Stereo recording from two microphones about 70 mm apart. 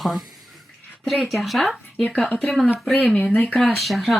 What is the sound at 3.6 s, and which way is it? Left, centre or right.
Speech, centre.